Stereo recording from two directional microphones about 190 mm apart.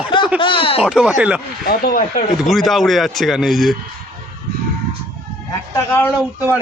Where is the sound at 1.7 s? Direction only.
50° left (ahead or behind).